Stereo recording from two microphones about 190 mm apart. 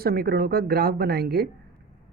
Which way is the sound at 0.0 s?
55° right (ahead or behind).